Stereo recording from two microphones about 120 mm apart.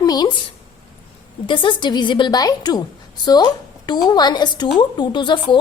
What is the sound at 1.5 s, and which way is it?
A woman's voice, 45° left (ahead or behind).